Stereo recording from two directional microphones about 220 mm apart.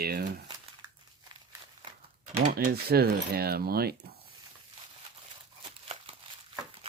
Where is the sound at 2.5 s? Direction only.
45° right (ahead or behind).